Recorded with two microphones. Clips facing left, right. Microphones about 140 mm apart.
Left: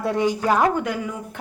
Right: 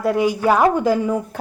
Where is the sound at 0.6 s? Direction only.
30° right (ahead or behind).